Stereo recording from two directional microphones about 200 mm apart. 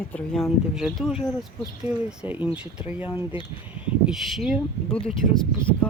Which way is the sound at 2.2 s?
10° right (ahead or behind).